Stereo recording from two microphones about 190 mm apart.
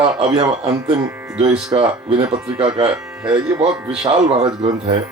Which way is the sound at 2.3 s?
5° right (ahead or behind).